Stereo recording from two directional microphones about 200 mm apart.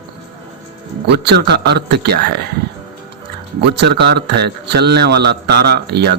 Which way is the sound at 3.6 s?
55° right (ahead or behind).